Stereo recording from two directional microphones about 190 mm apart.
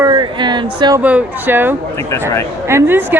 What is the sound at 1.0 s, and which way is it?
A woman's voice, 10° right (ahead or behind).